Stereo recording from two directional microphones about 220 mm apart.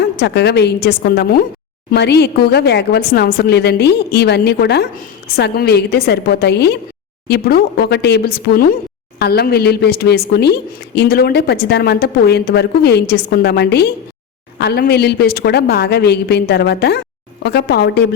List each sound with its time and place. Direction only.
0.0 s a woman's voice: 50° left (ahead or behind)